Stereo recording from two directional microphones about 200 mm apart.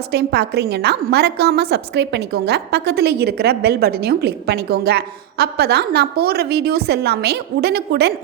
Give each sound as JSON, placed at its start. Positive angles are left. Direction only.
{"t": 0.1, "sound": "a woman's voice", "side_deg": -55}